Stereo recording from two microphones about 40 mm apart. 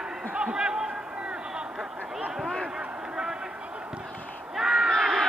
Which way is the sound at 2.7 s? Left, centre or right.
Centre.